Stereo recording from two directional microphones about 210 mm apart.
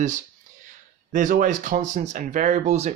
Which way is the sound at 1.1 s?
40° right (ahead or behind).